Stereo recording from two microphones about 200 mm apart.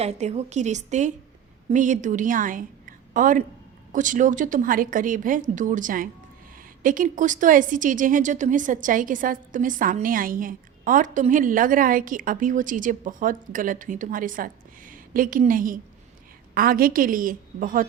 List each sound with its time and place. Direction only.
0.0 s a woman's voice: 35° right (ahead or behind)